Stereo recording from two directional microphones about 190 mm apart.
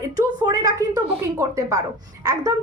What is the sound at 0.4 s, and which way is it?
A woman's voice, 20° right (ahead or behind).